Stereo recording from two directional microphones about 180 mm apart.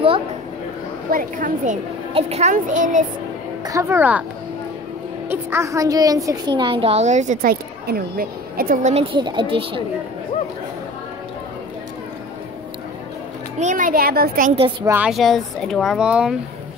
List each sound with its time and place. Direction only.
1.1 s a child's voice: 45° right (ahead or behind)
3.6 s a woman's voice: 15° right (ahead or behind)
5.3 s a woman's voice: 15° right (ahead or behind); by 7.5 s 40° right (ahead or behind)
7.8 s a woman's voice: 55° right (ahead or behind)
9.1 s a woman's voice: 25° right (ahead or behind)
13.6 s a child's voice: 45° right (ahead or behind)
14.9 s speech: 5° right (ahead or behind)